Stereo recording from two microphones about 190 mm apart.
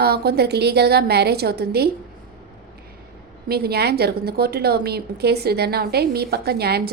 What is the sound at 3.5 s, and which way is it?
A woman's voice, 55° right (ahead or behind).